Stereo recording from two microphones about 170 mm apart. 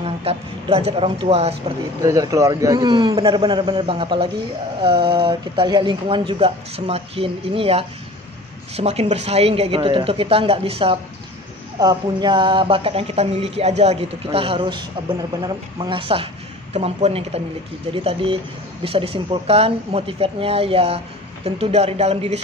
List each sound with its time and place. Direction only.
0.0 s speech: 35° right (ahead or behind)
2.0 s a man's voice: 20° right (ahead or behind); by 22.4 s 40° right (ahead or behind)